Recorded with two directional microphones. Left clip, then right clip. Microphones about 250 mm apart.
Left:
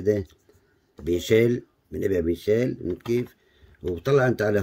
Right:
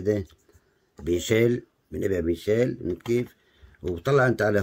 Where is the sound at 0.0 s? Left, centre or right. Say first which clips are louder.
Left 2 dB; centre.